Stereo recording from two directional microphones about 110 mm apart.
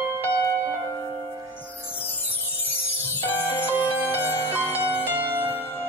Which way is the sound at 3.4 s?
20° left (ahead or behind).